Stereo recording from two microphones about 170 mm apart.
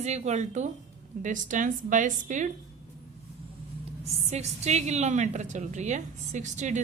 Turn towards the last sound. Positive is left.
turn(degrees=-45)  # may be behind; listen again after turning